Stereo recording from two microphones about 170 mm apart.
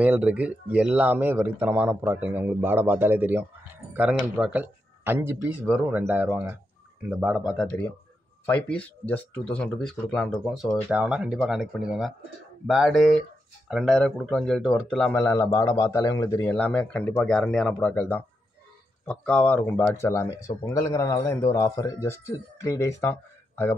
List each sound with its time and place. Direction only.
0.0 s a man's voice: 10° right (ahead or behind); by 23.7 s 15° left (ahead or behind)